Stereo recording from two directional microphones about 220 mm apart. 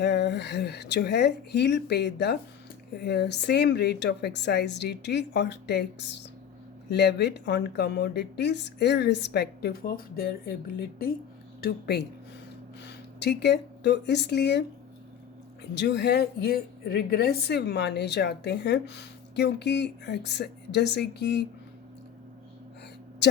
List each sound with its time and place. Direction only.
0.0 s a woman's voice: 50° left (ahead or behind)
15.7 s a woman's voice: 50° left (ahead or behind)